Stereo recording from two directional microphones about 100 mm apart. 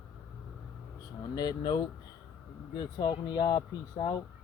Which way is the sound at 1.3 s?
40° left (ahead or behind).